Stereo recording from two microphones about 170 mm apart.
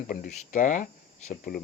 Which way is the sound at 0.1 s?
50° left (ahead or behind).